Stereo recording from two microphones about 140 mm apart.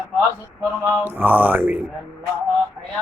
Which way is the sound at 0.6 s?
15° right (ahead or behind).